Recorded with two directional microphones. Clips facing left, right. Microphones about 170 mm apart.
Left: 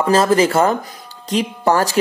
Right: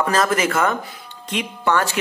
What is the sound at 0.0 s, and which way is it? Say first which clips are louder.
Speech: left 5 dB; 30° left (ahead or behind).